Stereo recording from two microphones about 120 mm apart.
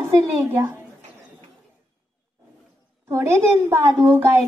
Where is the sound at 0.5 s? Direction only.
20° right (ahead or behind).